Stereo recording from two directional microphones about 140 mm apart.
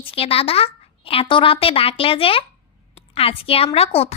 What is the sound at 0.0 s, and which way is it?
A woman's voice, 40° left (ahead or behind).